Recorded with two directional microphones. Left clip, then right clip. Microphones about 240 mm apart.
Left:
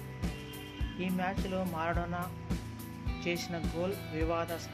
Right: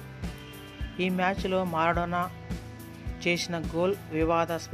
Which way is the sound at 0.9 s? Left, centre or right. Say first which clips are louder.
Right 8 dB; right.